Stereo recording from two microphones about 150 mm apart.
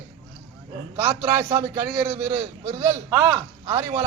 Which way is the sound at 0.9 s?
15° right (ahead or behind).